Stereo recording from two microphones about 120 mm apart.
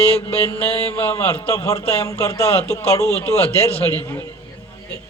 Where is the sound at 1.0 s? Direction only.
20° left (ahead or behind).